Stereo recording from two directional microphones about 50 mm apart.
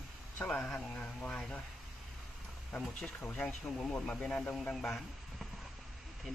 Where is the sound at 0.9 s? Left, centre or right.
Left.